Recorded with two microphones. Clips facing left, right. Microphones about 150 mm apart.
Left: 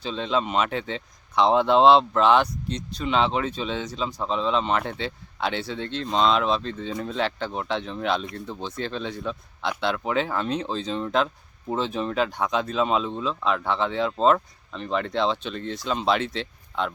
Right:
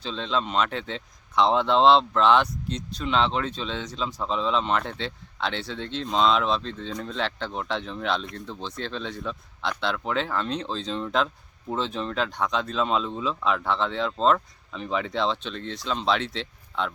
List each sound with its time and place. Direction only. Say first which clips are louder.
0.0 s speech: left 2 dB; 5° left (ahead or behind)